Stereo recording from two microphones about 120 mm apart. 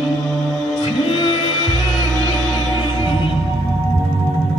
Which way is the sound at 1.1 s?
35° left (ahead or behind).